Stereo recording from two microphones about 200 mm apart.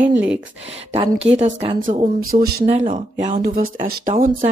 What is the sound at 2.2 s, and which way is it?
Speech, 50° right (ahead or behind).